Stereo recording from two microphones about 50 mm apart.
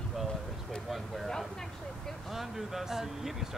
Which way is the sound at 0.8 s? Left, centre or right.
Centre.